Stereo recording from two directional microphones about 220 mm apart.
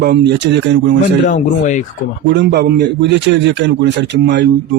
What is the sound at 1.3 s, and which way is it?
Speech, 35° left (ahead or behind).